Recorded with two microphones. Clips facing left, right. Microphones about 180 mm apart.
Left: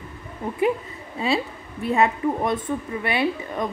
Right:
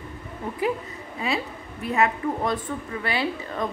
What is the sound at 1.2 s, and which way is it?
A woman's voice, 30° left (ahead or behind).